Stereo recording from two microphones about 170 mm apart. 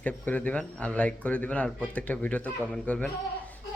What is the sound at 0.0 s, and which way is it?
Speech, 10° left (ahead or behind).